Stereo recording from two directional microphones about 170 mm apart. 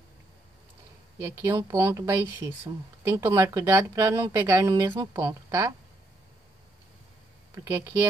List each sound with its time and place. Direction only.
1.1 s speech: 15° right (ahead or behind)
7.6 s speech: 15° right (ahead or behind)